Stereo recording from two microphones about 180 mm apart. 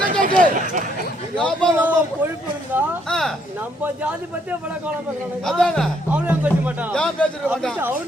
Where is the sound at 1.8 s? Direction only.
10° right (ahead or behind).